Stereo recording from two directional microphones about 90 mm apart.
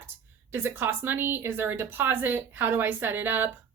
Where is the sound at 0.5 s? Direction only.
25° right (ahead or behind).